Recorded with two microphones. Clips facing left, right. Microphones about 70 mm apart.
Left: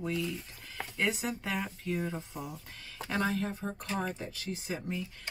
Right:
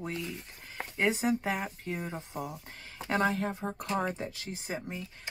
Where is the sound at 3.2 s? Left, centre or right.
Right.